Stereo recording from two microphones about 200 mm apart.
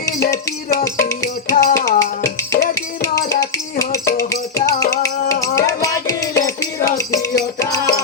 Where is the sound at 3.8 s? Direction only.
15° left (ahead or behind).